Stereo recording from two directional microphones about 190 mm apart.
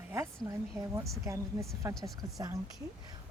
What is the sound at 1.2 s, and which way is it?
Speech, 15° right (ahead or behind).